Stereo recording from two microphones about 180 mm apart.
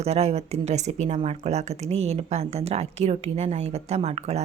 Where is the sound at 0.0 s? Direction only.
35° right (ahead or behind).